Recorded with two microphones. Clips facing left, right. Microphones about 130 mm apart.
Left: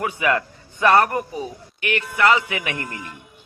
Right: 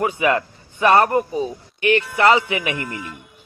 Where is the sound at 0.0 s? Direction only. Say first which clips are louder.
Right 3 dB; 25° right (ahead or behind).